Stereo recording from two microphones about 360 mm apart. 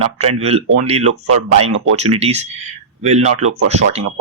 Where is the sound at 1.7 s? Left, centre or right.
Right.